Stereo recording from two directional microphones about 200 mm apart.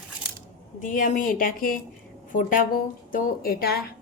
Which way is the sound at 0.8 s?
40° left (ahead or behind).